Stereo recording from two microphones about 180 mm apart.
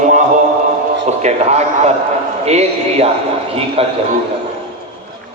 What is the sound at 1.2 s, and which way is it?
A man's voice, 40° right (ahead or behind).